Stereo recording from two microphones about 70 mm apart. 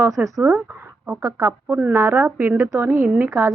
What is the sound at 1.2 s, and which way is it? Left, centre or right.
A woman's voice, right.